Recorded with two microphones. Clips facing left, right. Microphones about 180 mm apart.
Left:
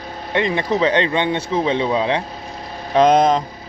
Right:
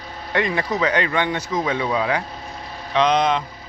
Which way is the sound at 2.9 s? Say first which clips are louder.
Left 5 dB; 45° left (ahead or behind).